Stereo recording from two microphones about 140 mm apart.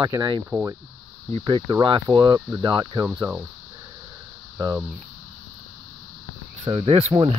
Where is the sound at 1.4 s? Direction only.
30° right (ahead or behind).